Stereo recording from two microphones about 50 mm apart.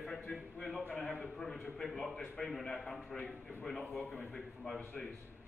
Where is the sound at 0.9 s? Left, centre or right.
Left.